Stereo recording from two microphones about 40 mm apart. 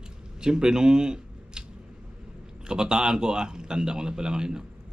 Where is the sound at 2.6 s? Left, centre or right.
Centre.